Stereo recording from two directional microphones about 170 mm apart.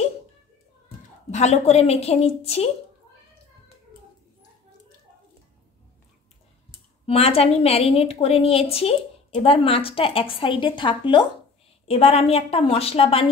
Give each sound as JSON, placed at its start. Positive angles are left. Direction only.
{"t": 1.3, "sound": "a woman's voice", "side_deg": 40}
{"t": 7.1, "sound": "a woman's voice", "side_deg": 35}